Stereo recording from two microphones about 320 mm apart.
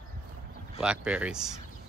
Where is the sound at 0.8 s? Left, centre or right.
Centre.